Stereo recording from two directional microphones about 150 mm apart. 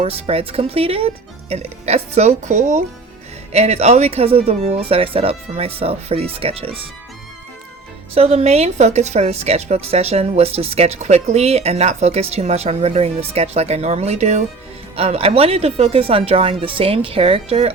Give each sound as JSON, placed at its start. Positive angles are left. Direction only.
{"t": 0.0, "sound": "a woman's voice", "side_deg": -40}
{"t": 8.1, "sound": "a woman's voice", "side_deg": -45}